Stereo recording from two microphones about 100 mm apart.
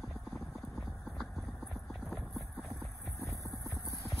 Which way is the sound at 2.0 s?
Centre (ahead or behind).